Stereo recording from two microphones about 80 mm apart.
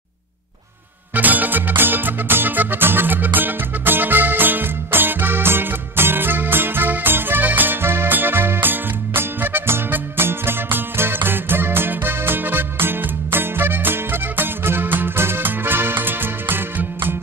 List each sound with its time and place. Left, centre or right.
1.1 s music: right